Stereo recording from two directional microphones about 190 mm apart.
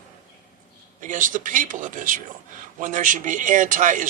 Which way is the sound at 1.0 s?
45° right (ahead or behind).